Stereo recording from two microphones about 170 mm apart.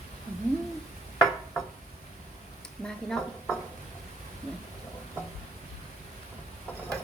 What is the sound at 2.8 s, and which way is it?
Speech, 5° left (ahead or behind).